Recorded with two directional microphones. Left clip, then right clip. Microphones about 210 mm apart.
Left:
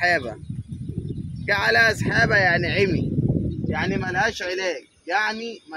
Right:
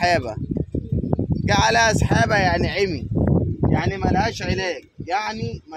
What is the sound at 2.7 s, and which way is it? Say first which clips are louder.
Speech: left 1 dB; 20° right (ahead or behind).